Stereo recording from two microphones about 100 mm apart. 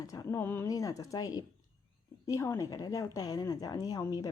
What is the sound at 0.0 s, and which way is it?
Speech, 35° left (ahead or behind).